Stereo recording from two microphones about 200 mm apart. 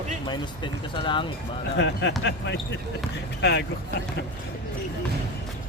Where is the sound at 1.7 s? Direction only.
60° left (ahead or behind).